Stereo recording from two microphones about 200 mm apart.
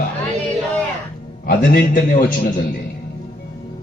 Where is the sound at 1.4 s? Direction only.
45° left (ahead or behind).